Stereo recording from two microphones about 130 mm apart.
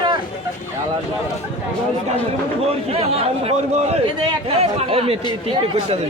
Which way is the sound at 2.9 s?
50° right (ahead or behind).